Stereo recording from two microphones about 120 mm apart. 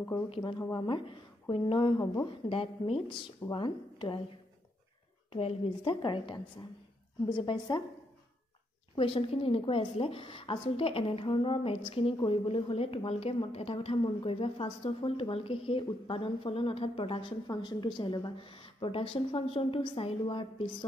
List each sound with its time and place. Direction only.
0.3 s a woman's voice: 40° left (ahead or behind)
5.3 s a woman's voice: 50° left (ahead or behind)
6.0 s a woman's voice: 40° left (ahead or behind)
8.9 s a woman's voice: 50° left (ahead or behind)